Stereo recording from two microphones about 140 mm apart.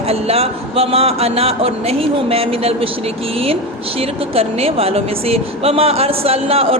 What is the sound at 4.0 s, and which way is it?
Speech, 45° right (ahead or behind).